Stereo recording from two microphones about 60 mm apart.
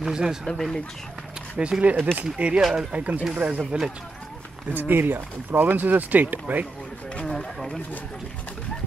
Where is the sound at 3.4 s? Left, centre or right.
Right.